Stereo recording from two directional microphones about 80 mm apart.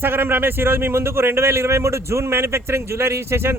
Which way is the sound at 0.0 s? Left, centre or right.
Right.